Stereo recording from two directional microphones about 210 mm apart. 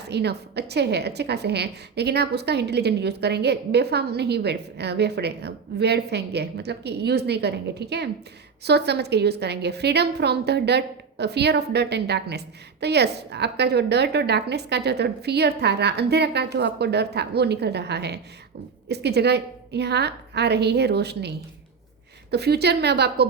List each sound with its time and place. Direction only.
0.0 s a woman's voice: 50° right (ahead or behind)